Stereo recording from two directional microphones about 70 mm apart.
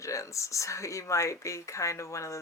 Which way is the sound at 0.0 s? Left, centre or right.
Left.